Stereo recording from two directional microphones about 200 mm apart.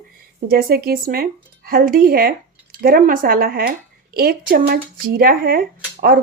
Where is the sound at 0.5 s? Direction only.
50° right (ahead or behind).